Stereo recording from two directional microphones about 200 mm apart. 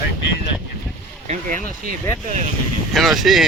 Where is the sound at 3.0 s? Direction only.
Centre (ahead or behind).